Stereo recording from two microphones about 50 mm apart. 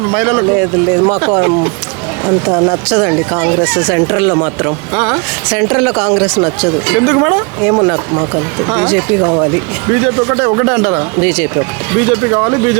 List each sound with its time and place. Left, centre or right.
0.0 s speech: right